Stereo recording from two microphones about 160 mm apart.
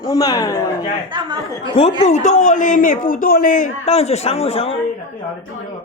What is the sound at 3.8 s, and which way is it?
Speech, 40° left (ahead or behind).